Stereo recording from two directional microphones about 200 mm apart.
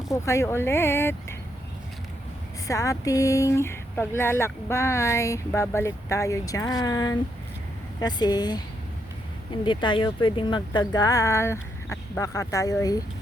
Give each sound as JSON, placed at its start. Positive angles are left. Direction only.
{"t": 0.1, "sound": "speech", "side_deg": 15}
{"t": 2.6, "sound": "speech", "side_deg": 15}
{"t": 9.6, "sound": "speech", "side_deg": 25}